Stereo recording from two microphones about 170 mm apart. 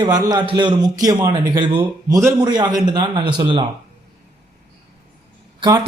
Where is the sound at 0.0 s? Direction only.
25° right (ahead or behind).